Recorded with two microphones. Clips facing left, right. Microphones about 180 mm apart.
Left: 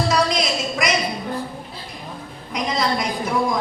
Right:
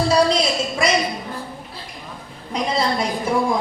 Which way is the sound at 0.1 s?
30° right (ahead or behind).